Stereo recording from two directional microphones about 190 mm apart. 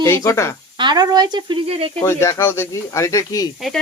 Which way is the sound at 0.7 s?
20° right (ahead or behind).